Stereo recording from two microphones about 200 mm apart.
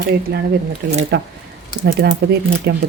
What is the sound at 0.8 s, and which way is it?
Speech, 60° right (ahead or behind).